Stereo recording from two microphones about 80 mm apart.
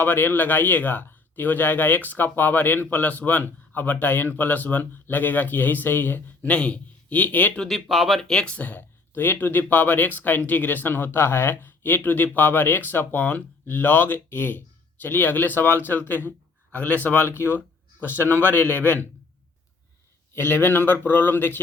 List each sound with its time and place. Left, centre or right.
0.0 s speech: left
7.6 s speech: centre
8.3 s speech: centre
20.3 s speech: left